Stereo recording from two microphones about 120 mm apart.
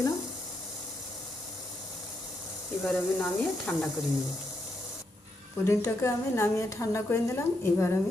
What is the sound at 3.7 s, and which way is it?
Speech, 10° left (ahead or behind).